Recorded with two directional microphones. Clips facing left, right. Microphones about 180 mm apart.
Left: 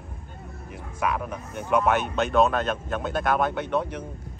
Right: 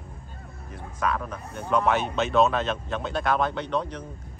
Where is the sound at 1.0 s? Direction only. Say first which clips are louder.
Left 1 dB; 10° left (ahead or behind).